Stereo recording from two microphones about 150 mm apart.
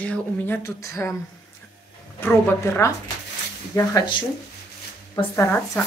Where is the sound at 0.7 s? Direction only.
20° left (ahead or behind).